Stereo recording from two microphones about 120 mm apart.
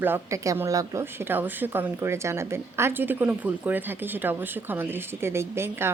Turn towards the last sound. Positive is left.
turn(degrees=-20)  # may be behind; listen again after turning